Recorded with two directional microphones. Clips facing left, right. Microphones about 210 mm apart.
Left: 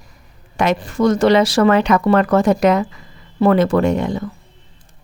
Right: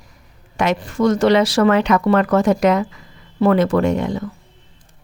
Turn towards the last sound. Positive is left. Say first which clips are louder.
# left 1 dB
turn(degrees=30)  # may be behind; listen again after turning